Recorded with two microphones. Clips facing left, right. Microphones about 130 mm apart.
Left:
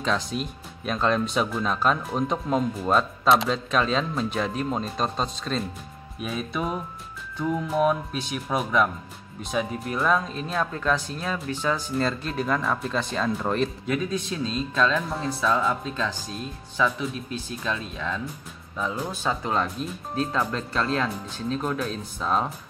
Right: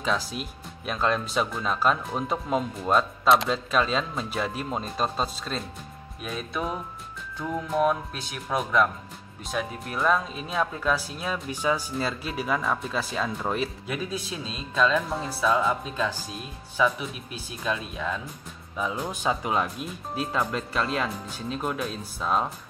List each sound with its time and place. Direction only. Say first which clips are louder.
0.0 s speech: left 2 dB; 5° right (ahead or behind)